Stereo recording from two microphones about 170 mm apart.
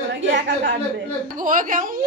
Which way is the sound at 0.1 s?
90° right.